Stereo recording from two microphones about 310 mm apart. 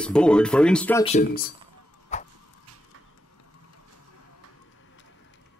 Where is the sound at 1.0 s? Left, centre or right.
Left.